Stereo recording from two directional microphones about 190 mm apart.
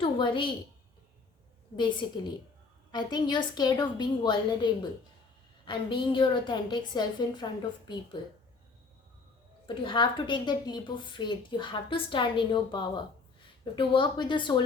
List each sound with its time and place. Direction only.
0.0 s a woman's voice: 25° left (ahead or behind)
1.7 s a woman's voice: 25° left (ahead or behind)
9.6 s a woman's voice: 25° left (ahead or behind)